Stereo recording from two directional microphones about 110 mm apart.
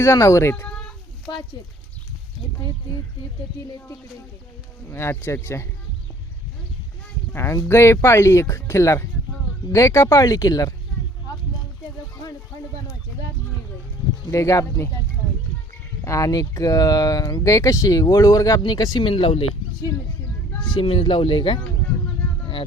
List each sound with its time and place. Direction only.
0.0 s speech: 25° left (ahead or behind)
0.7 s a sound: 10° left (ahead or behind)
4.9 s speech: 25° left (ahead or behind)
7.3 s speech: 25° left (ahead or behind)
14.3 s speech: 30° left (ahead or behind)
16.0 s speech: 30° left (ahead or behind); by 19.5 s 65° left (ahead or behind)
20.6 s speech: 45° left (ahead or behind)